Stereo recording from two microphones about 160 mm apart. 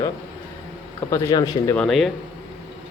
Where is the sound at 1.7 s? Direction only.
Centre (ahead or behind).